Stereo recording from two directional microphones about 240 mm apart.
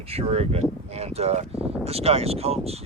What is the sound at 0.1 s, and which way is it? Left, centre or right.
Speech, right.